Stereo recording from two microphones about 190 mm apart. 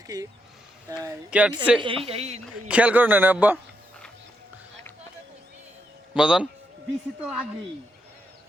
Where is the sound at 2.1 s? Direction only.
35° right (ahead or behind).